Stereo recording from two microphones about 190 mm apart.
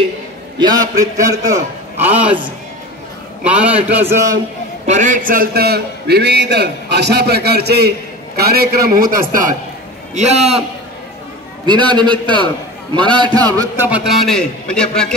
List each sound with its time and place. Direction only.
0.6 s a man's voice: 20° right (ahead or behind)
3.4 s a man's voice: 5° right (ahead or behind)
4.8 s a man's voice: 40° right (ahead or behind)
10.1 s a man's voice: 35° right (ahead or behind)
11.6 s a man's voice: 25° right (ahead or behind)
13.8 s a man's voice: 5° right (ahead or behind)